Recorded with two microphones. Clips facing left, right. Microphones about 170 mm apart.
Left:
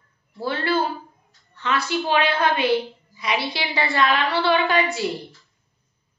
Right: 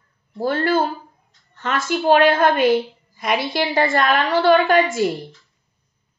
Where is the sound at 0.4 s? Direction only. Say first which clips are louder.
Right 4 dB; 45° right (ahead or behind).